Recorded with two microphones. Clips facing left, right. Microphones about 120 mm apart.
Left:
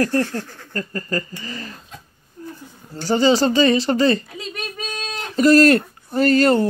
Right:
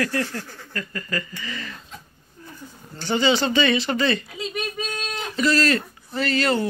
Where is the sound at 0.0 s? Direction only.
45° left (ahead or behind).